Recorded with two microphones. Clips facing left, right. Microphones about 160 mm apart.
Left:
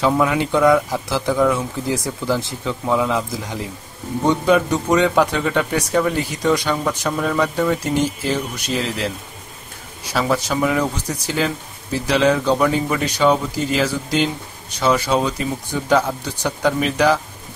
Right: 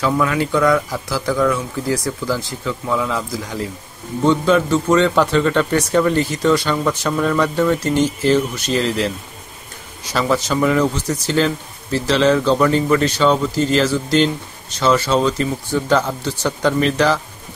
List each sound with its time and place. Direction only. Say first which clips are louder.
0.0 s speech: left 1 dB; 20° left (ahead or behind); by 9.1 s 5° left (ahead or behind)
10.1 s speech: right 2 dB; 10° left (ahead or behind)